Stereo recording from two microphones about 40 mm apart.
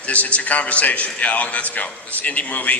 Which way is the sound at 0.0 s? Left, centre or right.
Left.